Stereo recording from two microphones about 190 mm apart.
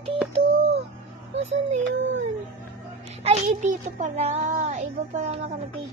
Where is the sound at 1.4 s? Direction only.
35° right (ahead or behind).